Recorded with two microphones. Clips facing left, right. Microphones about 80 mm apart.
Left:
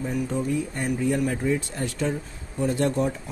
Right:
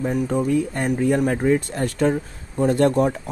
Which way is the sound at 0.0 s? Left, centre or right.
Right.